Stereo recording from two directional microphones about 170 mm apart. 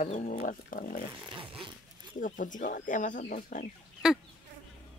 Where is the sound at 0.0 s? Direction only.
45° left (ahead or behind).